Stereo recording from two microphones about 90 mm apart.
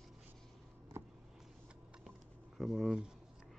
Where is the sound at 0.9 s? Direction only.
30° right (ahead or behind).